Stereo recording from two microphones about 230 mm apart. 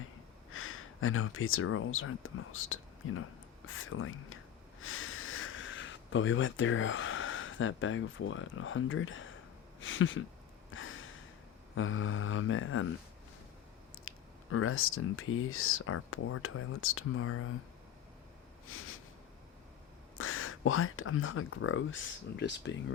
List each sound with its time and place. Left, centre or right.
0.5 s speech: left
10.7 s a sound: left
11.7 s speech: left
14.1 s a sound: left
14.5 s speech: left
18.7 s speech: left
20.1 s speech: left